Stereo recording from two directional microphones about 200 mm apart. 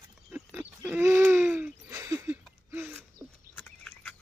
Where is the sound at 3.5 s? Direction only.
5° left (ahead or behind).